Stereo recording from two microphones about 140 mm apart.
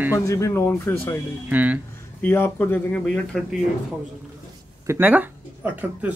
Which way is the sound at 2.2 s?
15° left (ahead or behind).